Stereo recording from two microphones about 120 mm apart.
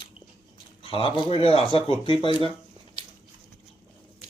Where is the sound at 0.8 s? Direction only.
50° left (ahead or behind).